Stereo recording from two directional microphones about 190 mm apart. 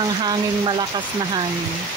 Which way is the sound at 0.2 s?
25° right (ahead or behind).